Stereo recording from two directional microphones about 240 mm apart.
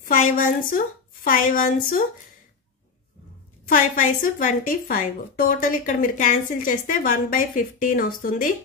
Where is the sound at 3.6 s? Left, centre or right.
Left.